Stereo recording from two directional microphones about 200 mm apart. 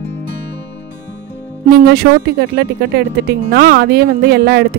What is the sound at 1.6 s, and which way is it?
Speech, 50° right (ahead or behind).